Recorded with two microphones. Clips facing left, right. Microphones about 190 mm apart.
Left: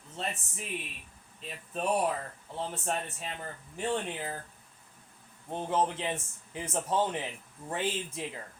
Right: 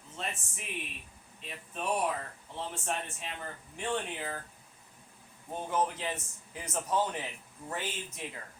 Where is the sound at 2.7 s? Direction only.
40° left (ahead or behind).